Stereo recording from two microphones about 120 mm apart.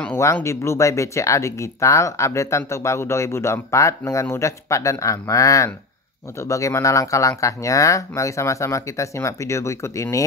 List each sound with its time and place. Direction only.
0.0 s speech: 20° left (ahead or behind)